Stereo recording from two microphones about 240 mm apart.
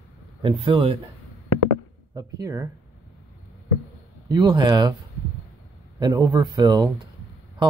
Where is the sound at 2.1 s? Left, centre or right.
Centre.